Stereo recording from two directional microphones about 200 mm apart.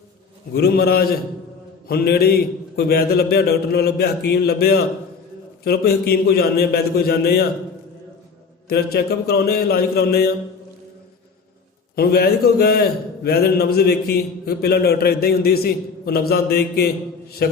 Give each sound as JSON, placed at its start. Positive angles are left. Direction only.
{"t": 0.5, "sound": "a man's voice", "side_deg": 50}
{"t": 8.7, "sound": "a man's voice", "side_deg": 50}
{"t": 11.9, "sound": "a man's voice", "side_deg": 50}